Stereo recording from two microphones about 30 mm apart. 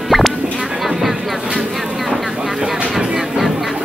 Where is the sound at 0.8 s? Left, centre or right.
Centre.